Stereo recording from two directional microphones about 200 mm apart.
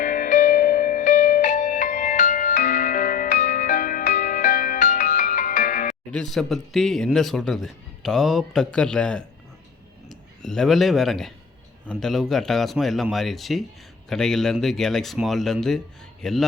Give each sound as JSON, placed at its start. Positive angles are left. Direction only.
{"t": 0.0, "sound": "music", "side_deg": 40}
{"t": 6.1, "sound": "speech", "side_deg": 0}